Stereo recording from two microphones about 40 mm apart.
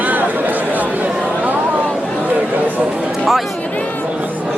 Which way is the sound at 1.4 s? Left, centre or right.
Right.